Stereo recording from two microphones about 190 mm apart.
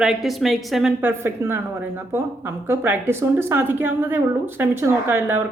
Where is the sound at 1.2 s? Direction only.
10° right (ahead or behind).